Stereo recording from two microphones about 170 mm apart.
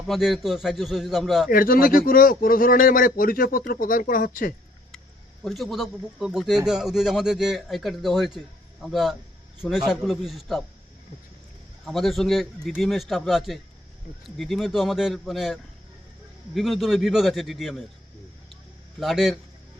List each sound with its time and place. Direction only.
0.1 s a man's voice: centre (ahead or behind)
1.5 s speech: 60° left (ahead or behind)
5.4 s a man's voice: centre (ahead or behind)
11.9 s a man's voice: centre (ahead or behind)
16.6 s a man's voice: centre (ahead or behind)
18.9 s a man's voice: centre (ahead or behind)